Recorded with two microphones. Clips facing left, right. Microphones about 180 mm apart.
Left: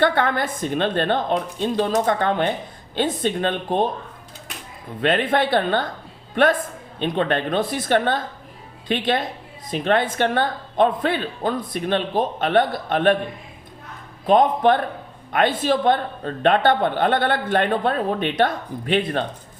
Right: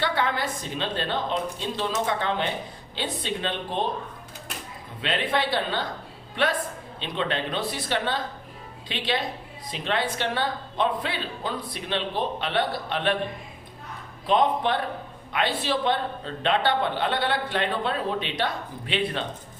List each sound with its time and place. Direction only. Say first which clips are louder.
0.0 s a woman's voice: left 6 dB; 50° left (ahead or behind)
4.9 s a woman's voice: left 7 dB; 50° left (ahead or behind)
14.3 s a woman's voice: left 6 dB; 50° left (ahead or behind)